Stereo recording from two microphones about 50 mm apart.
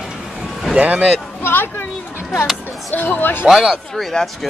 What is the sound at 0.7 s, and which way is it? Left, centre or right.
Speech, right.